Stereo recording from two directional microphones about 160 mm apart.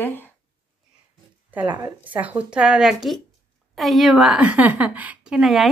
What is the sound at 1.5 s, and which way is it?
A woman's voice, 10° right (ahead or behind).